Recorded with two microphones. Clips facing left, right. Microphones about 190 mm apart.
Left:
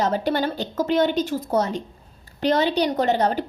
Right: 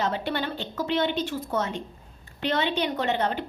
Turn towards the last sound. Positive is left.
turn(degrees=40)  # may be behind; listen again after turning